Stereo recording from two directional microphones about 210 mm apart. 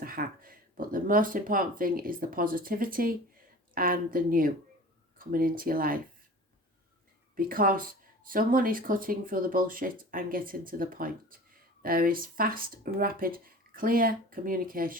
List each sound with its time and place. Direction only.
0.0 s speech: 45° right (ahead or behind)
7.3 s speech: 40° right (ahead or behind)